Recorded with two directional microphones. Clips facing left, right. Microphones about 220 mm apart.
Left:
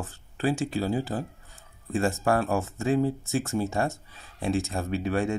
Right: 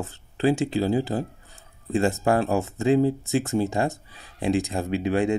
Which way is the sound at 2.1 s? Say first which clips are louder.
Right 1 dB; 20° right (ahead or behind).